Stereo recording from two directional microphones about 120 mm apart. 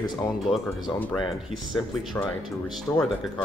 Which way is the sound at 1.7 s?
20° left (ahead or behind).